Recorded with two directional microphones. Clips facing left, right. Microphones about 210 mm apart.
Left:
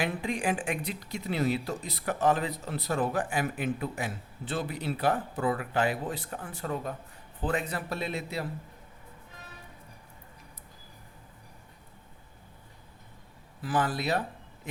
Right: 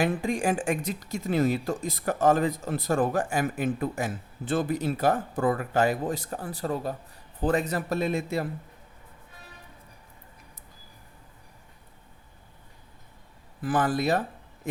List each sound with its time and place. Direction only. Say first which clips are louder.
0.0 s speech: right 5 dB; 45° right (ahead or behind)
13.6 s speech: right 4 dB; 50° right (ahead or behind)